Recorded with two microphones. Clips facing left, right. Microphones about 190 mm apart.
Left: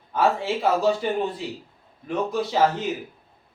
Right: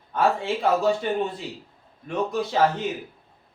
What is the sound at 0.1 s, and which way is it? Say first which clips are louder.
Speech: left 1 dB; centre (ahead or behind).